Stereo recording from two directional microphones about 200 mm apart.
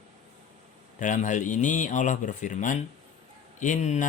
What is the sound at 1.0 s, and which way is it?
Mantra, 40° left (ahead or behind).